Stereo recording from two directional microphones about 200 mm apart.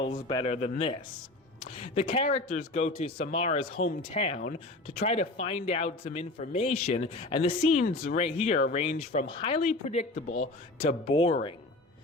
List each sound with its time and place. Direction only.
0.0 s a man's voice: 25° left (ahead or behind)
9.6 s speech: 40° left (ahead or behind)